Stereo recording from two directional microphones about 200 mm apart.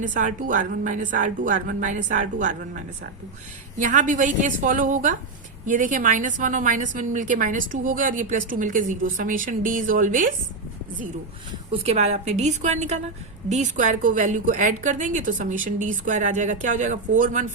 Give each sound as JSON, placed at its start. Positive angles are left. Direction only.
{"t": 0.0, "sound": "a woman's voice", "side_deg": -40}
{"t": 11.7, "sound": "a woman's voice", "side_deg": -30}